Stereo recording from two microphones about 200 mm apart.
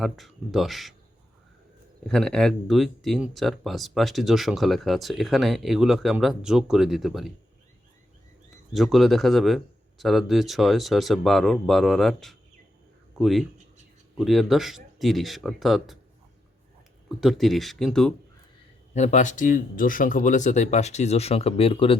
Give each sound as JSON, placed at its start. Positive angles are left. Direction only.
{"t": 0.0, "sound": "speech", "side_deg": 0}
{"t": 2.0, "sound": "speech", "side_deg": 5}
{"t": 8.7, "sound": "speech", "side_deg": 0}
{"t": 17.2, "sound": "speech", "side_deg": 0}
{"t": 18.9, "sound": "speech", "side_deg": 35}